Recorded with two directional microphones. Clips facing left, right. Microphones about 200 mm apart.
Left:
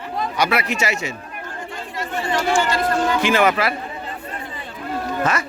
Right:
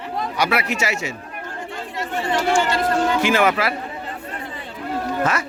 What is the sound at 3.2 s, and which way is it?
Speech, 5° right (ahead or behind).